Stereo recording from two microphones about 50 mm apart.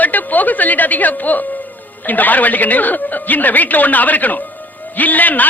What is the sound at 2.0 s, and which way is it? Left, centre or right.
A man's voice, left.